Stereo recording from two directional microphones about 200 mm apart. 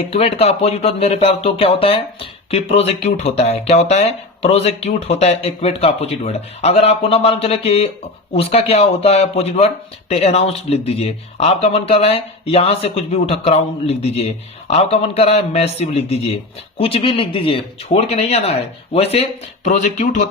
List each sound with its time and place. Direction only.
0.1 s speech: 30° left (ahead or behind)